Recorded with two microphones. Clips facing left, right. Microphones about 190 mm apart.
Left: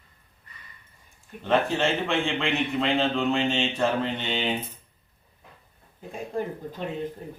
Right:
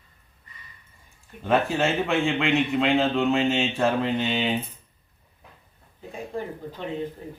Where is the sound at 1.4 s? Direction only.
5° right (ahead or behind).